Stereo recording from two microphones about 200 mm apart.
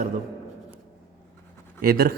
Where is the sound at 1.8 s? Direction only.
50° right (ahead or behind).